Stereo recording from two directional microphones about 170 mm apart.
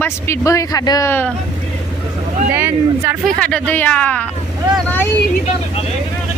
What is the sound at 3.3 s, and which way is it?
Speech, 5° left (ahead or behind).